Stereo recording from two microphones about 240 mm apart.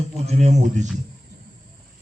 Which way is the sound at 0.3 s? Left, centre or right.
Right.